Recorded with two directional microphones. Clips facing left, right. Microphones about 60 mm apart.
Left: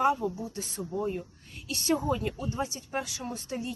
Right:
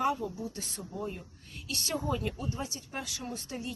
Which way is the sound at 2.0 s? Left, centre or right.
Centre.